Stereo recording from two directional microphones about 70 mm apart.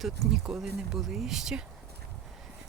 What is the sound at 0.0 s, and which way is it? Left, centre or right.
Speech, centre.